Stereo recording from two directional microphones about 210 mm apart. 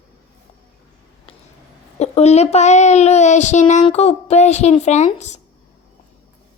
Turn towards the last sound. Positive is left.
turn(degrees=35)  # may be behind; listen again after turning